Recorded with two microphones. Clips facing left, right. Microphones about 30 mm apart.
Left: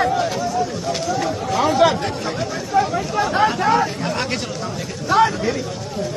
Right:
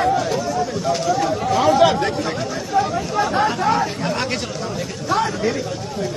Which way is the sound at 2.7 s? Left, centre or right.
Centre.